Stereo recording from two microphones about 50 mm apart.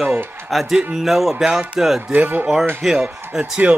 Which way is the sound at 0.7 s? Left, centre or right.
Centre.